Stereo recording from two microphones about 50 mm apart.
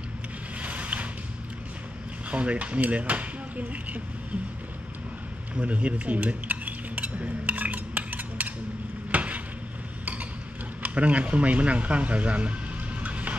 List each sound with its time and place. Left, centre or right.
0.6 s boat: right
2.3 s speech: right
5.5 s cutlery: right
9.1 s a sound: right
10.8 s speech: right
13.0 s music: right